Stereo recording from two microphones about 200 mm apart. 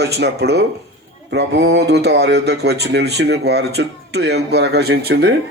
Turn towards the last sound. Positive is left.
turn(degrees=-55)  # may be behind; listen again after turning